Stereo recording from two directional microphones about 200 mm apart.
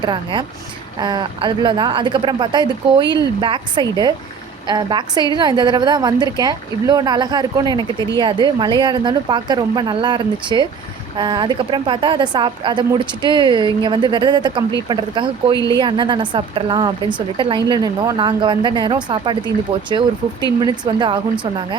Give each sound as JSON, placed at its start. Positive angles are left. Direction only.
{"t": 0.0, "sound": "a woman's voice", "side_deg": -25}